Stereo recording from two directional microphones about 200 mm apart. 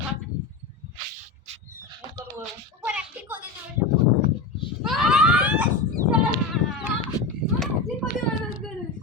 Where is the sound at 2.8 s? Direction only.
10° right (ahead or behind).